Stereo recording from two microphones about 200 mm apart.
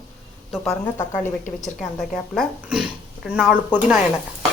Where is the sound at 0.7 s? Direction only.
20° left (ahead or behind).